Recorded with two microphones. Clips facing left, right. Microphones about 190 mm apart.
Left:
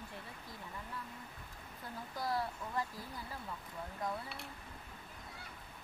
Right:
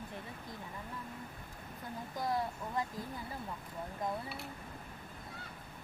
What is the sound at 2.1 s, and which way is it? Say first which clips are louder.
Speech: right 2 dB; 20° right (ahead or behind).